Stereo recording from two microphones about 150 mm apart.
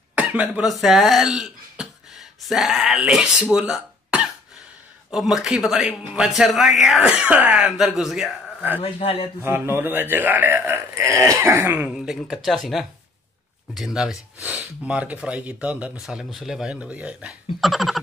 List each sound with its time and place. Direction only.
0.1 s speech: 10° right (ahead or behind)
3.5 s a sound: 5° right (ahead or behind)
5.1 s a man's voice: 5° right (ahead or behind)
9.0 s speech: 40° left (ahead or behind)
9.4 s a man's voice: 15° right (ahead or behind)